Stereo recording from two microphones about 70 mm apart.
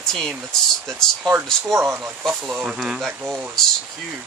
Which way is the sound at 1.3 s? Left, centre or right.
Right.